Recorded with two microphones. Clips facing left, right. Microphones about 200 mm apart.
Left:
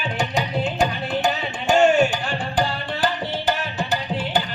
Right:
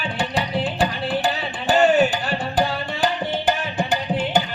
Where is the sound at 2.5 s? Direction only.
5° right (ahead or behind).